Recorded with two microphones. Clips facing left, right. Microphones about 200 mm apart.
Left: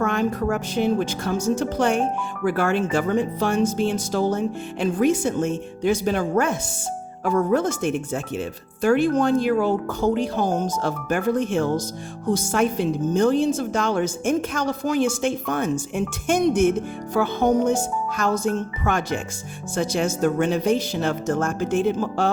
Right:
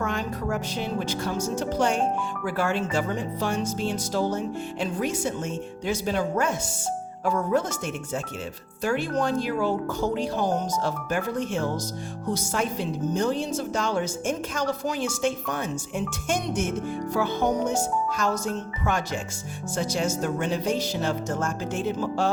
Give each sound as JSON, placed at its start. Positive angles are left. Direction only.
{"t": 0.0, "sound": "speech", "side_deg": 55}
{"t": 8.8, "sound": "speech", "side_deg": 50}